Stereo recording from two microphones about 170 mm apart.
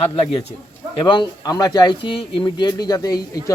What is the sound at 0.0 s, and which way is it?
A man's voice, 35° left (ahead or behind).